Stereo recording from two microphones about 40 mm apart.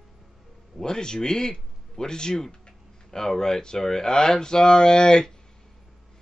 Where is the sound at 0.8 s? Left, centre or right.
Centre.